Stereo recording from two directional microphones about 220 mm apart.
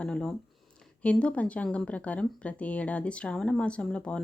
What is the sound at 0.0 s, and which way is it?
Speech, 5° left (ahead or behind).